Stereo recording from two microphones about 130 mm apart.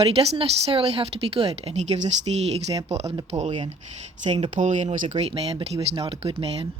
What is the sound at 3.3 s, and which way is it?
Speech, 65° right (ahead or behind).